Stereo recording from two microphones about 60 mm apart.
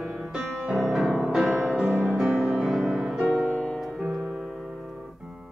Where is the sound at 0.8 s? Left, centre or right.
Centre.